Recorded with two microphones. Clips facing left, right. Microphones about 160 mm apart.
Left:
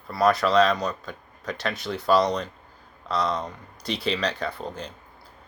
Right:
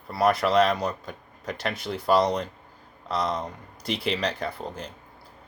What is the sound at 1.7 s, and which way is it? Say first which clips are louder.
Speech: left 1 dB; 70° left (ahead or behind).